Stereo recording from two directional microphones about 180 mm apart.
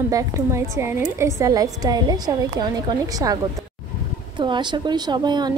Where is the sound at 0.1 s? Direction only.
15° right (ahead or behind).